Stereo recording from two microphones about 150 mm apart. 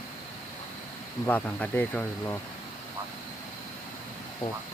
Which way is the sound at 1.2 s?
10° left (ahead or behind).